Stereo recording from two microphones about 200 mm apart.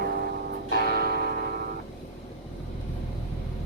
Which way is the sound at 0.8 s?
50° right (ahead or behind).